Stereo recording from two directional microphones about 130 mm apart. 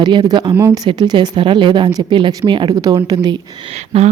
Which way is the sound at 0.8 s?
35° right (ahead or behind).